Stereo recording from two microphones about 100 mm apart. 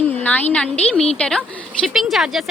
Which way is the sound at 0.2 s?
15° left (ahead or behind).